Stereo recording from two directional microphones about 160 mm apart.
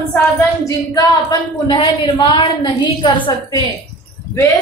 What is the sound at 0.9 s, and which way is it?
A woman's voice, 25° left (ahead or behind).